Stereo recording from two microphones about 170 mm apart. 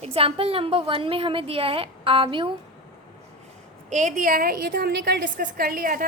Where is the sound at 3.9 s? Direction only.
45° right (ahead or behind).